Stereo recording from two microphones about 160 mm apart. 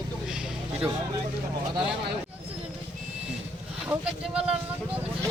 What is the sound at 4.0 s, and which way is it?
Speech, 5° right (ahead or behind).